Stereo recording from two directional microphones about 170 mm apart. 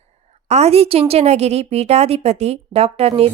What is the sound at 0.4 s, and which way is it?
A woman's voice, 40° right (ahead or behind).